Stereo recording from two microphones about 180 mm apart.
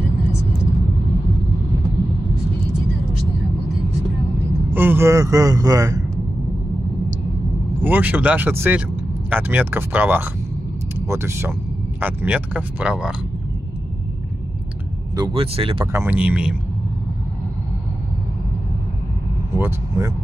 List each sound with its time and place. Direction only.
4.7 s speech: 10° right (ahead or behind)
7.8 s speech: 10° right (ahead or behind)
15.1 s speech: 25° right (ahead or behind)
15.8 s speech: 15° right (ahead or behind)
19.5 s speech: 15° right (ahead or behind)